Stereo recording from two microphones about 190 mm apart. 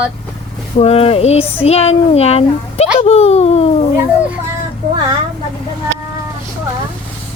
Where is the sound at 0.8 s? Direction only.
30° left (ahead or behind).